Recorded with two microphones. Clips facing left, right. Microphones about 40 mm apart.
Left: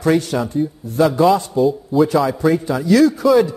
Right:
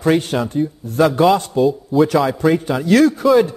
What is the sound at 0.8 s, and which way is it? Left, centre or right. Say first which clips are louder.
Speech: even; right.